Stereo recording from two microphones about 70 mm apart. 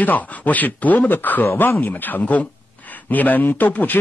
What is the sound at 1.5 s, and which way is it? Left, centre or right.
Speech, left.